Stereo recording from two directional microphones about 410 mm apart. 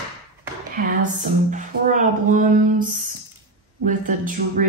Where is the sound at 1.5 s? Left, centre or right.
Centre.